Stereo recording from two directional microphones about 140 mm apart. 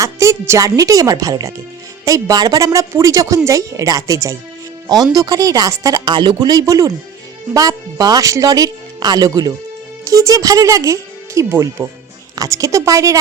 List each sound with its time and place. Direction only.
0.0 s a woman's voice: 20° right (ahead or behind)